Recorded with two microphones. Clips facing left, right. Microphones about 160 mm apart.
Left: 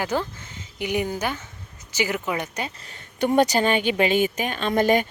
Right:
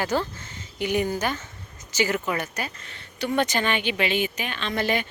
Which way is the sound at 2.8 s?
40° left (ahead or behind).